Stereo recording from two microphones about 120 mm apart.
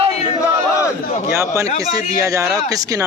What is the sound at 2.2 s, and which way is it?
Speech, 30° right (ahead or behind).